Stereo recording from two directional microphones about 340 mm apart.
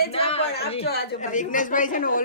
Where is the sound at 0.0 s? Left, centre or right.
Centre.